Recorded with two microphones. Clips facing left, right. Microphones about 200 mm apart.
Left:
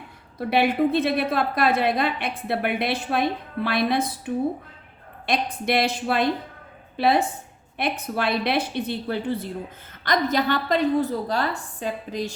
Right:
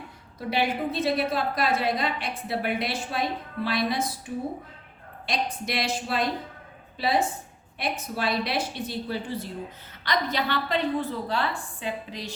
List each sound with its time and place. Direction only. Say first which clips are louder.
0.3 s a woman's voice: left 6 dB; 60° left (ahead or behind)
10.0 s a woman's voice: left 5 dB; 45° left (ahead or behind)